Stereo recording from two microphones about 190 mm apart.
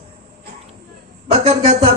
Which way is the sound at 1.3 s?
35° right (ahead or behind).